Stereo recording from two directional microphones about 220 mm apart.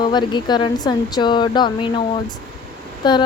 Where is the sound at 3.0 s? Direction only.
20° left (ahead or behind).